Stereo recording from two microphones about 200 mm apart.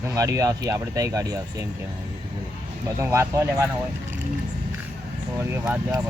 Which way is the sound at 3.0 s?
15° right (ahead or behind).